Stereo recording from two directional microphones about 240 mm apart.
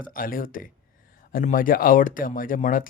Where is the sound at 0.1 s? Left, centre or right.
Left.